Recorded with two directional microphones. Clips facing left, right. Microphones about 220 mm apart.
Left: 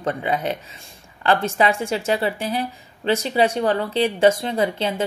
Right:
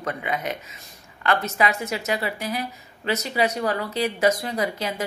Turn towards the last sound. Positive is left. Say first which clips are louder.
# left 5 dB
turn(degrees=30)  # may be behind; listen again after turning